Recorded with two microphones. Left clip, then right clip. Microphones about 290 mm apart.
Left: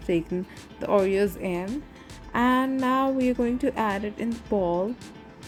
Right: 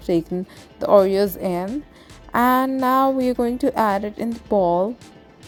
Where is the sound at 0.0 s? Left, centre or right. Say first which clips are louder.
Right 5 dB; right.